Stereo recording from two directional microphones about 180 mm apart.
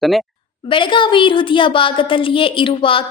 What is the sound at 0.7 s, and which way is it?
A woman's voice, 25° left (ahead or behind).